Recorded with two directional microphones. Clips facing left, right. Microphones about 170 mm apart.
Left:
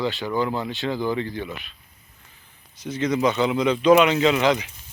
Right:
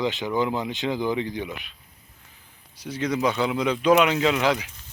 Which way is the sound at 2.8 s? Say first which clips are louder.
Left 3 dB; 10° right (ahead or behind).